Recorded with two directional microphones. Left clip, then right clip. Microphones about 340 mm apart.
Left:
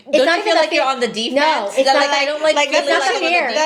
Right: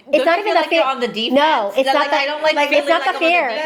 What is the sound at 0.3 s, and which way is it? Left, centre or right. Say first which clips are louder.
Speech: even; right.